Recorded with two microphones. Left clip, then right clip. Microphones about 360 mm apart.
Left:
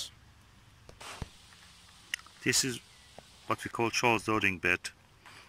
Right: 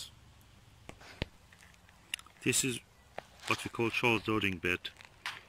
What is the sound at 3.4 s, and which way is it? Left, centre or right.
Speech, centre.